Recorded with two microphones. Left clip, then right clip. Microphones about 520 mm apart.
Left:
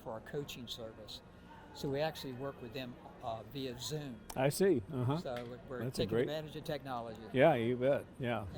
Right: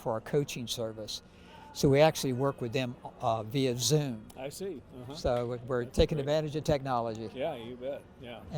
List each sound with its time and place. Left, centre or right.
0.0 s a man's voice: right
4.4 s speech: left
5.2 s a man's voice: right
7.3 s speech: left